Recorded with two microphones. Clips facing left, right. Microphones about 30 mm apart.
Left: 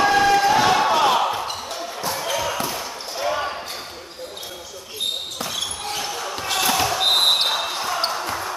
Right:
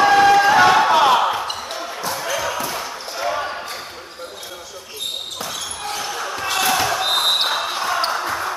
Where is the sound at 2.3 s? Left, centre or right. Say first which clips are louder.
Right 2 dB; centre.